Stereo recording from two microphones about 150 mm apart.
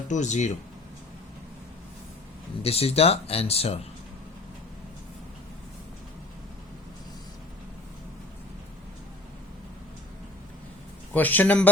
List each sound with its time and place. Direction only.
0.1 s speech: 55° left (ahead or behind)
2.6 s speech: 40° left (ahead or behind)
11.1 s a man's voice: 10° left (ahead or behind)